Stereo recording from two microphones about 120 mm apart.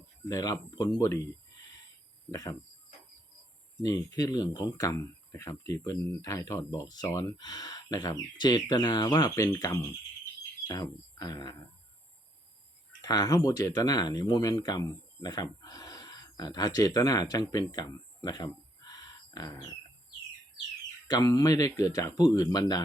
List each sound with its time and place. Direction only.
0.3 s speech: 30° left (ahead or behind)
2.3 s speech: 30° left (ahead or behind)
3.8 s speech: 30° left (ahead or behind)
13.0 s speech: 30° left (ahead or behind)
21.1 s speech: 30° left (ahead or behind)